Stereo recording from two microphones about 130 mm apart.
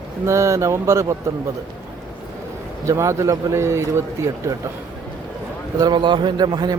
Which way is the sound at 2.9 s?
20° right (ahead or behind).